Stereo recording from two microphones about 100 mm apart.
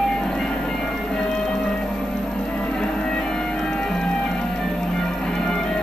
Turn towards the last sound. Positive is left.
turn(degrees=5)  # may be behind; listen again after turning